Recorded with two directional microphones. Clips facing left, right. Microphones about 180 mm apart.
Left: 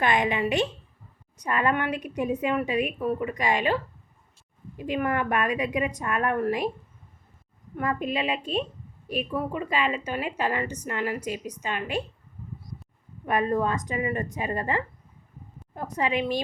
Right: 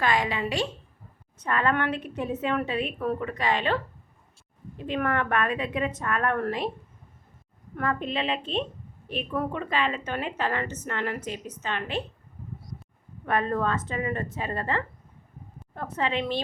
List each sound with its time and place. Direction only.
0.0 s a woman's voice: 20° left (ahead or behind)
4.8 s a woman's voice: 10° left (ahead or behind)
7.8 s a woman's voice: 10° left (ahead or behind)
13.2 s a woman's voice: 10° left (ahead or behind)